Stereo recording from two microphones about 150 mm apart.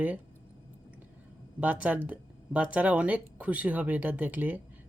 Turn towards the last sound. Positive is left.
turn(degrees=-10)  # may be behind; listen again after turning